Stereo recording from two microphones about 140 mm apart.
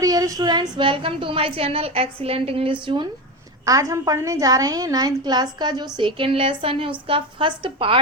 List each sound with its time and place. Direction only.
0.0 s speech: 25° right (ahead or behind)
3.7 s a woman's voice: 20° right (ahead or behind); by 8.0 s 40° right (ahead or behind)